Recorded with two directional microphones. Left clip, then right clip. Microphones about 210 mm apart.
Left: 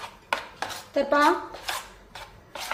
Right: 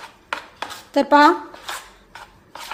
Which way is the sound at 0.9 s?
55° right (ahead or behind).